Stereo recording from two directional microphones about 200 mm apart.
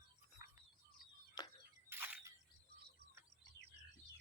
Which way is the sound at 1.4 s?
20° left (ahead or behind).